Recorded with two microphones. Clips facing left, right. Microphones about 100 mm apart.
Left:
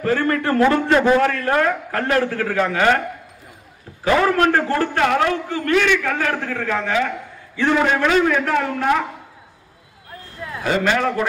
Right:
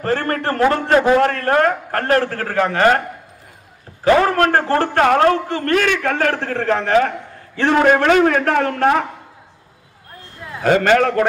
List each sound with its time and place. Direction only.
0.0 s a man's voice: 45° right (ahead or behind)
4.0 s a man's voice: 40° right (ahead or behind)
6.1 s a man's voice: 65° right (ahead or behind)
6.8 s a man's voice: 50° right (ahead or behind)
10.6 s a man's voice: 55° right (ahead or behind)